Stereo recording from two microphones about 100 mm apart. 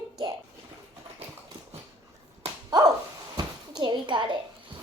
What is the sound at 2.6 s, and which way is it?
Dog, 40° right (ahead or behind).